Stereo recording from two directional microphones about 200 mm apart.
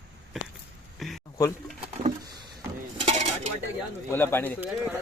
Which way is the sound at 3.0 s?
30° right (ahead or behind).